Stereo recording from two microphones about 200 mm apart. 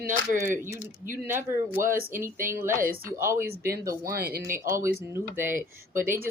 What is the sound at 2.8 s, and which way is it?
Speech, 45° right (ahead or behind).